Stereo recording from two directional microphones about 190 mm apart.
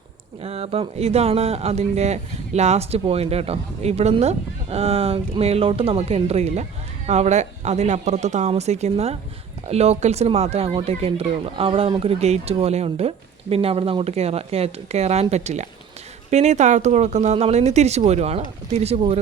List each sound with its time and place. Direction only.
0.4 s speech: 30° right (ahead or behind)